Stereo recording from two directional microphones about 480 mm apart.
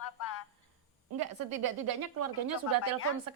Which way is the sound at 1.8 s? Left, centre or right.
Right.